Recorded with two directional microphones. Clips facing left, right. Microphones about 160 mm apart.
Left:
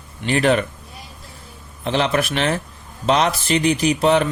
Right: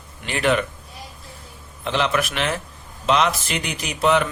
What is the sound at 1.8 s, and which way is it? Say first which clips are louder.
Speech: left 2 dB; 35° left (ahead or behind).